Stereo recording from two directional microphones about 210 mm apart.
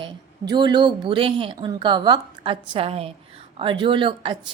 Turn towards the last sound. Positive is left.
turn(degrees=-25)  # may be behind; listen again after turning